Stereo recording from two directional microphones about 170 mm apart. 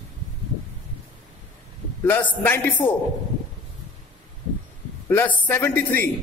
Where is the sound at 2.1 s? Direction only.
10° left (ahead or behind).